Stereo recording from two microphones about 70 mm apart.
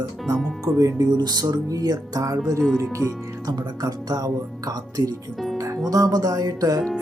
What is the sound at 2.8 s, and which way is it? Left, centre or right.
Speech, right.